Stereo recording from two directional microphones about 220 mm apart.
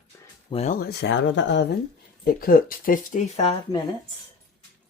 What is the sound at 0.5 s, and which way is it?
Speech, 35° left (ahead or behind).